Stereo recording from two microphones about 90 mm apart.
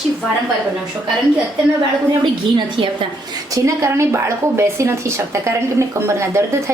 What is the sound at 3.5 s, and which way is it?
A woman's voice, 35° right (ahead or behind).